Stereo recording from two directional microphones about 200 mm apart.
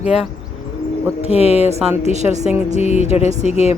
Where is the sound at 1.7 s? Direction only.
35° right (ahead or behind).